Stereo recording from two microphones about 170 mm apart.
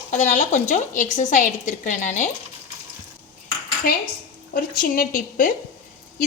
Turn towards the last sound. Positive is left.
turn(degrees=50)  # may be behind; listen again after turning